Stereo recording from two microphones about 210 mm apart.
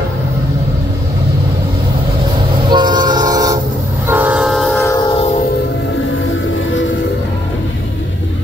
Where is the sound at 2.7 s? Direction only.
20° right (ahead or behind); by 4.9 s 5° left (ahead or behind).